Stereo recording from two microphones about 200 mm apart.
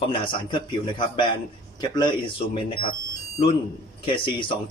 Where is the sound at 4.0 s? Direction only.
25° left (ahead or behind).